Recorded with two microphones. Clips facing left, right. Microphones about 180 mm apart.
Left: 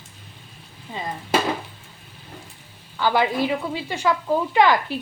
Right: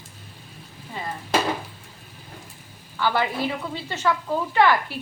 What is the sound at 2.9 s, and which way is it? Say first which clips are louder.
A woman's voice: left 3 dB; 15° left (ahead or behind).